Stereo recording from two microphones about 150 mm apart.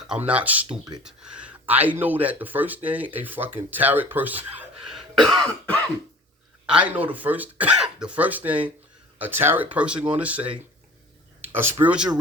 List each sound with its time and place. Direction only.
0.3 s speech: 10° right (ahead or behind)
4.9 s throat clearing: centre (ahead or behind)
6.7 s speech: 10° right (ahead or behind)
11.4 s a sound: 15° right (ahead or behind)
11.8 s speech: 5° right (ahead or behind)